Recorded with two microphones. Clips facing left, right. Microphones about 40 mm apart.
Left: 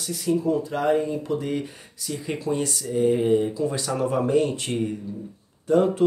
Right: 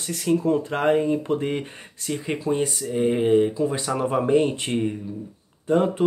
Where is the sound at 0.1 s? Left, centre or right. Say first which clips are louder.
Right 2 dB; right.